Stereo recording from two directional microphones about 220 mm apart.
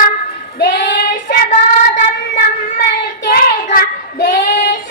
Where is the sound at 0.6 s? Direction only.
50° left (ahead or behind).